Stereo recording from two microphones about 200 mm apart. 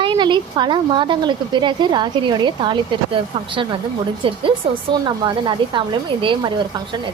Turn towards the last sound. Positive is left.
turn(degrees=-25)  # may be behind; listen again after turning